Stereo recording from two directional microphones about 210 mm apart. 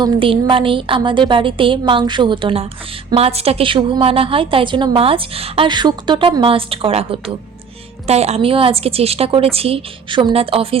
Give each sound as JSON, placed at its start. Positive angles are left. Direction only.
{"t": 0.0, "sound": "a woman's voice", "side_deg": -25}